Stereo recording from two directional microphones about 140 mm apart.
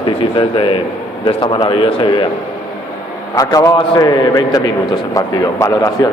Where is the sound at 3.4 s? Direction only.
25° left (ahead or behind).